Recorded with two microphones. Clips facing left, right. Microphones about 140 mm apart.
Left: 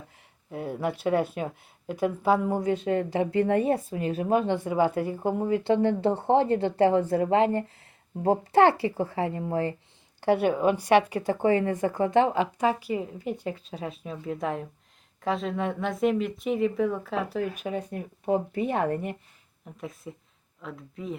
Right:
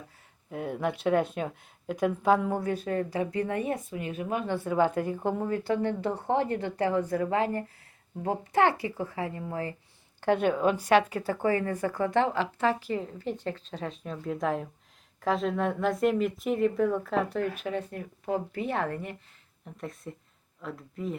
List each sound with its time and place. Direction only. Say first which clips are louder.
0.5 s speech: left 1 dB; 5° left (ahead or behind); by 4.5 s 30° left (ahead or behind)
4.5 s speech: left 1 dB; 10° left (ahead or behind)
5.6 s a woman's voice: left 7 dB; 30° left (ahead or behind)
10.2 s speech: left 2 dB; 10° left (ahead or behind)
17.6 s speech: left 1 dB; 15° left (ahead or behind)
19.6 s speech: even; centre (ahead or behind)